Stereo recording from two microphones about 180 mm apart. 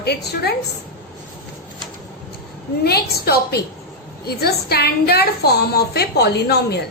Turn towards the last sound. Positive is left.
turn(degrees=65)  # may be behind; listen again after turning